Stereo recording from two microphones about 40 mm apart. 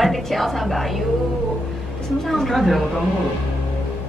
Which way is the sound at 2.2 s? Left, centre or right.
Centre.